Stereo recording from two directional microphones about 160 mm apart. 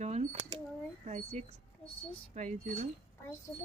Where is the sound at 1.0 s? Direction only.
45° right (ahead or behind).